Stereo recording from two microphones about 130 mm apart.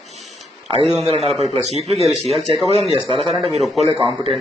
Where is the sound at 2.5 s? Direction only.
40° right (ahead or behind).